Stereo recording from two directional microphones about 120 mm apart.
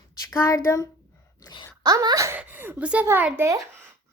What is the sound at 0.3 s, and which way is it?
Speech, 20° left (ahead or behind).